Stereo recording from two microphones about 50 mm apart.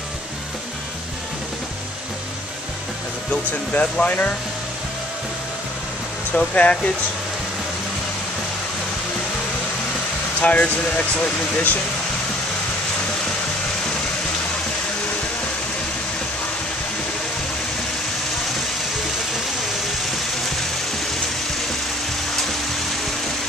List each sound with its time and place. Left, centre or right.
3.3 s speech: left
6.3 s speech: left
10.4 s speech: left